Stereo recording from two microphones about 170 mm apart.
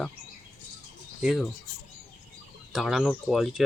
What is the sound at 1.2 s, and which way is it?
Speech, centre (ahead or behind).